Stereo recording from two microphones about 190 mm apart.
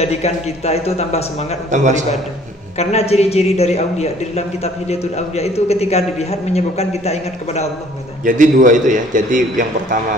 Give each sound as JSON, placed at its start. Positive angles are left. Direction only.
{"t": 0.0, "sound": "a woman's voice", "side_deg": 35}
{"t": 1.7, "sound": "a man's voice", "side_deg": -40}
{"t": 2.8, "sound": "a woman's voice", "side_deg": 35}
{"t": 8.3, "sound": "a man's voice", "side_deg": -45}